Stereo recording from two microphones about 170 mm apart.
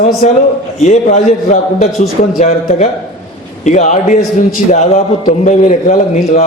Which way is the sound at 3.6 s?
45° left (ahead or behind).